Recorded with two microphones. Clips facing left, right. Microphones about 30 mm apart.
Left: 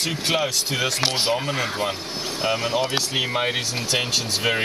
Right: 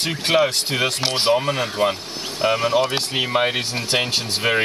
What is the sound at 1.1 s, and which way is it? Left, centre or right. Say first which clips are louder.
Speech: right 4 dB; right.